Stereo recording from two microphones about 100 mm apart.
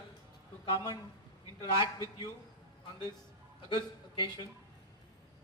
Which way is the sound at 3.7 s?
50° left (ahead or behind).